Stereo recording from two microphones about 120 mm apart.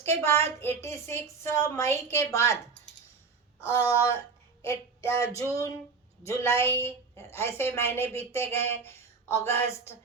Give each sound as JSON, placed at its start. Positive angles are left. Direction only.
{"t": 0.0, "sound": "a woman's voice", "side_deg": 20}
{"t": 3.8, "sound": "a woman's voice", "side_deg": 25}